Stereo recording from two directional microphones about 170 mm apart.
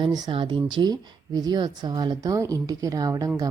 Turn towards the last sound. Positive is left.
turn(degrees=-20)  # may be behind; listen again after turning